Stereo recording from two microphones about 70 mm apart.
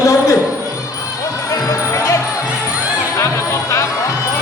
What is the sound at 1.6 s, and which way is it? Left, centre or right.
Music, left.